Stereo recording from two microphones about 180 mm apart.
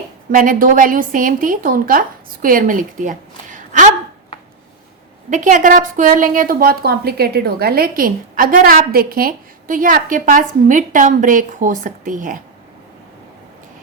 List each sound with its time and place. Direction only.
0.3 s a woman's voice: 50° right (ahead or behind)
5.3 s a woman's voice: 45° right (ahead or behind)